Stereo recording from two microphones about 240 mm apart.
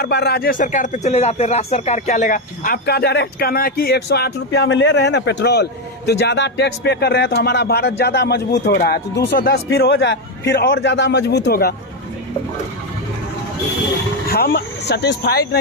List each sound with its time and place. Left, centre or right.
0.0 s speech: left
0.6 s speech: left
14.3 s speech: left